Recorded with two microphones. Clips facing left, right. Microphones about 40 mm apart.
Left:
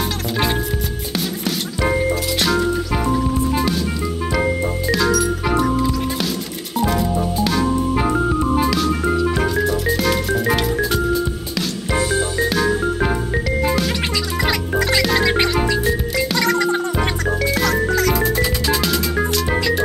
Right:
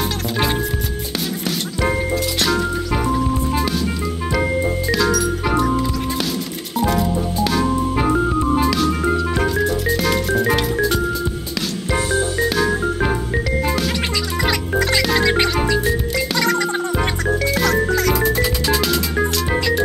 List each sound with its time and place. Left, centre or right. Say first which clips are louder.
0.3 s music: left 1 dB; centre
12.0 s music: left 1 dB; left
12.4 s music: even; centre